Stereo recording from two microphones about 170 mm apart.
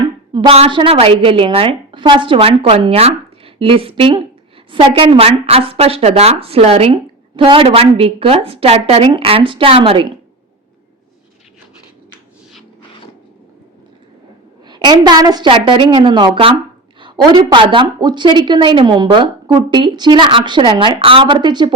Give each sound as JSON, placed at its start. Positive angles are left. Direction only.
{"t": 0.3, "sound": "a woman's voice", "side_deg": -35}
{"t": 14.7, "sound": "a woman's voice", "side_deg": -25}